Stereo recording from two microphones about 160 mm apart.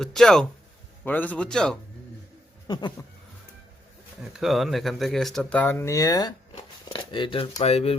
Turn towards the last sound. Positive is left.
turn(degrees=40)  # may be behind; listen again after turning